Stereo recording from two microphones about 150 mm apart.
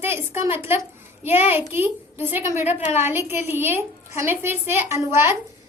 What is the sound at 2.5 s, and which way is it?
Speech, 50° left (ahead or behind).